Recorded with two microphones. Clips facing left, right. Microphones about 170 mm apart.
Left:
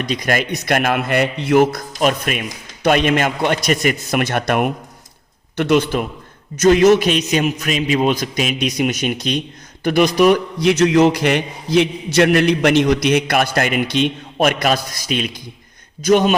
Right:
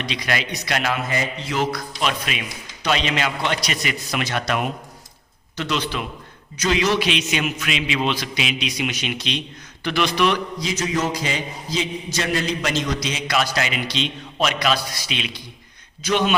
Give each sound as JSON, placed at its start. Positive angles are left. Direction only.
{"t": 0.0, "sound": "a man's voice", "side_deg": 45}
{"t": 10.6, "sound": "a man's voice", "side_deg": 65}